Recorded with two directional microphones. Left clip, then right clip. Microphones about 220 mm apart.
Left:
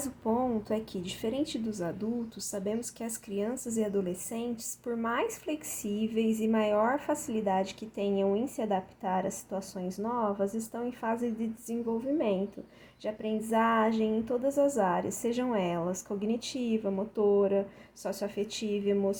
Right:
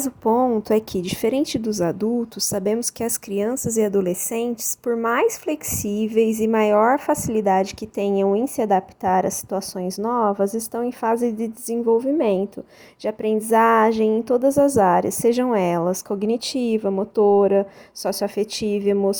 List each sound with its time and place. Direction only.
0.0 s a woman's voice: 45° right (ahead or behind)